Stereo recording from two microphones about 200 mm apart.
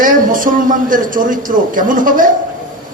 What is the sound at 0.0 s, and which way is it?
A man's voice, 45° right (ahead or behind).